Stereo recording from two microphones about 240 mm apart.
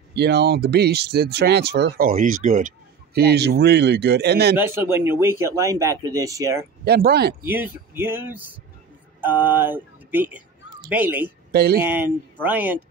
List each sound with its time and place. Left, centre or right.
0.1 s speech: right
4.6 s speech: centre
6.8 s speech: right
7.4 s speech: centre
11.5 s speech: right
11.8 s speech: centre